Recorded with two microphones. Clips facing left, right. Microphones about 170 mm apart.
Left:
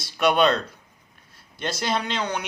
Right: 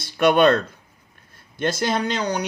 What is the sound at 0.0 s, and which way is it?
Speech, 55° right (ahead or behind).